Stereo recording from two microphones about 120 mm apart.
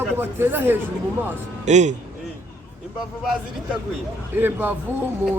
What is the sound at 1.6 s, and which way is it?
Speech, 80° right.